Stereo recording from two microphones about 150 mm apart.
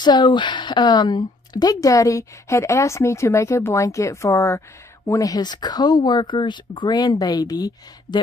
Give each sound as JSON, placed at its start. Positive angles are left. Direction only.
{"t": 0.0, "sound": "a woman's voice", "side_deg": 30}